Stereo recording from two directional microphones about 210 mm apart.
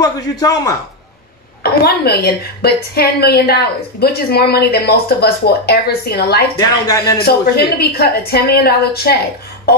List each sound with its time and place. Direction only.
0.0 s a man's voice: 15° left (ahead or behind)
1.6 s a woman's voice: 45° left (ahead or behind)
6.6 s a man's voice: 15° left (ahead or behind)
7.2 s a woman's voice: 50° left (ahead or behind)